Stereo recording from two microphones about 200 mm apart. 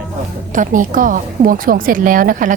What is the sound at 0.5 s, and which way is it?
A woman's voice, 40° right (ahead or behind).